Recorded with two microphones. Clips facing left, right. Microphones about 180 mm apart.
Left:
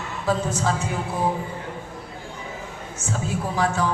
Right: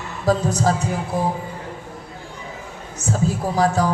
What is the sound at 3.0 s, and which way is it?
Speech, 40° right (ahead or behind).